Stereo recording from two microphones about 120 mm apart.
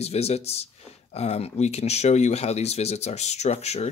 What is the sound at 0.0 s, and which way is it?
Speech, 60° left (ahead or behind).